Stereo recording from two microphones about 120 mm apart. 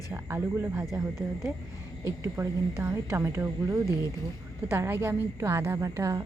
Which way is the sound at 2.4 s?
25° right (ahead or behind).